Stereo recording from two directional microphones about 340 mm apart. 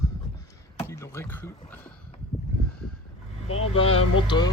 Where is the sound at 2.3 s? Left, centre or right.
Centre.